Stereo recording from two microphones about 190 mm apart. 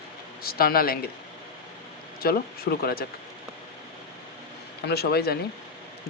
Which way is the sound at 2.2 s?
55° left (ahead or behind).